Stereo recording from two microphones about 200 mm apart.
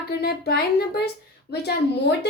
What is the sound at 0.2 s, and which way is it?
A child's voice, 50° left (ahead or behind).